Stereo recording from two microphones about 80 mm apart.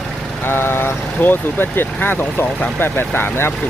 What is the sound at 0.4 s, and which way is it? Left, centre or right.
Speech, left.